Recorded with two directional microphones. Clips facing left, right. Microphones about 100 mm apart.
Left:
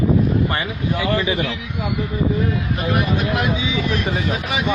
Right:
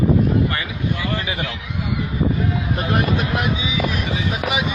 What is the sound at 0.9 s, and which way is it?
Speech, 80° left.